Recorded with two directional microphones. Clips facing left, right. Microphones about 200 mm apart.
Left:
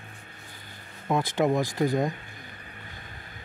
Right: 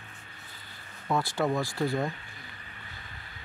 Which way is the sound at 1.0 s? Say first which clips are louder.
Left 4 dB; 20° left (ahead or behind).